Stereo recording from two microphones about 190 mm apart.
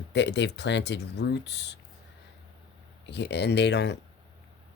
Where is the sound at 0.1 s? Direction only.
65° left (ahead or behind).